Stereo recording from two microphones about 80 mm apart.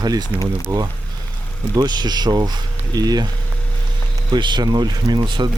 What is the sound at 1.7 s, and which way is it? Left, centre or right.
Speech, right.